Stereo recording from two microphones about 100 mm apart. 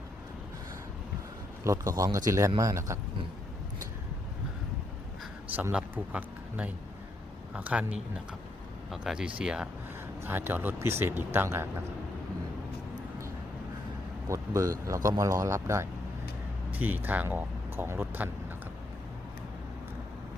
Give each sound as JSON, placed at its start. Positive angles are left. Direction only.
{"t": 1.6, "sound": "speech", "side_deg": -35}
{"t": 5.7, "sound": "speech", "side_deg": -15}
{"t": 10.2, "sound": "speech", "side_deg": -20}
{"t": 14.3, "sound": "speech", "side_deg": -35}